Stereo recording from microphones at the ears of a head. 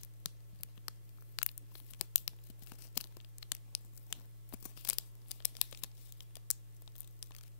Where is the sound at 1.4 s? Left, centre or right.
Left.